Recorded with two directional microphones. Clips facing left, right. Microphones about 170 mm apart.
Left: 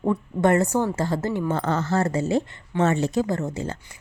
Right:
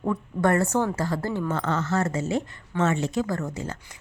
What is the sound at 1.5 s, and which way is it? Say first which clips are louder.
Speech: left 2 dB; 35° left (ahead or behind).